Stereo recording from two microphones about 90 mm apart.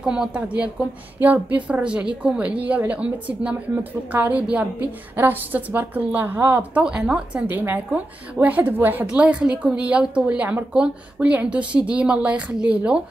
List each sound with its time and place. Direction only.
0.0 s a woman's voice: 10° right (ahead or behind)
6.8 s a woman's voice: 10° right (ahead or behind)